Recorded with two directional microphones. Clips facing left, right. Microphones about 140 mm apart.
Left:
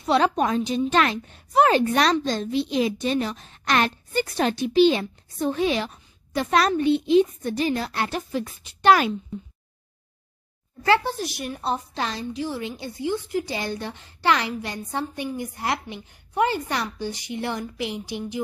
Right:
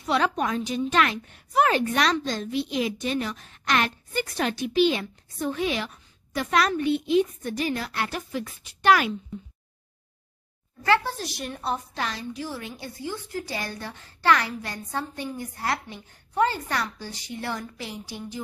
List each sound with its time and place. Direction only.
0.0 s a woman's voice: 30° left (ahead or behind)
11.1 s a woman's voice: 10° left (ahead or behind)
11.6 s a woman's voice: 25° left (ahead or behind)